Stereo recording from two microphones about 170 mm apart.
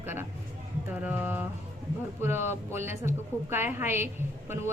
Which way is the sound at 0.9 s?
10° right (ahead or behind).